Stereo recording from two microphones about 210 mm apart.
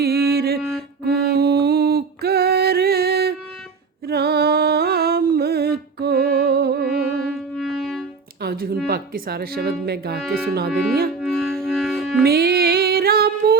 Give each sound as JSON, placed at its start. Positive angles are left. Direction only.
{"t": 0.0, "sound": "mantra", "side_deg": -50}
{"t": 1.0, "sound": "music", "side_deg": -50}
{"t": 7.3, "sound": "music", "side_deg": 0}
{"t": 8.4, "sound": "music", "side_deg": -50}
{"t": 8.9, "sound": "speech", "side_deg": -45}
{"t": 11.2, "sound": "music", "side_deg": 0}
{"t": 12.2, "sound": "music", "side_deg": -50}